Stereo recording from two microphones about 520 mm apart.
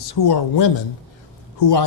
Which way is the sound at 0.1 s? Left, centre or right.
Left.